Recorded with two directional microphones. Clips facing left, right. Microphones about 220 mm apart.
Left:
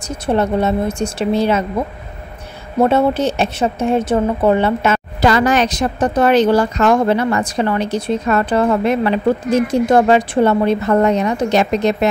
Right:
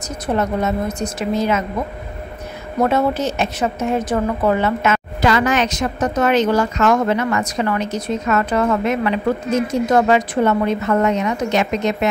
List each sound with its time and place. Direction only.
0.3 s a woman's voice: 30° left (ahead or behind)
2.8 s a woman's voice: 30° left (ahead or behind)